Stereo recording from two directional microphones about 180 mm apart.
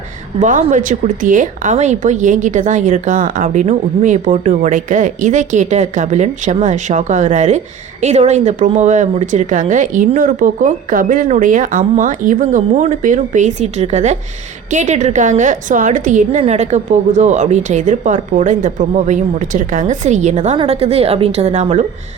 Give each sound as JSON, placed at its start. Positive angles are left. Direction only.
{"t": 0.3, "sound": "a woman's voice", "side_deg": -45}